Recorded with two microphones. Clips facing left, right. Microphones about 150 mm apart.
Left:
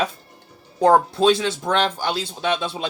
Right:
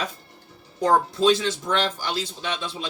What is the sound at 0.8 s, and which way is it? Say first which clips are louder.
Speech: left 4 dB; 60° left (ahead or behind).